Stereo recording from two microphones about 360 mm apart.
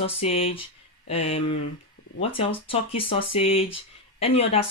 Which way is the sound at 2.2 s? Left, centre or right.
Centre.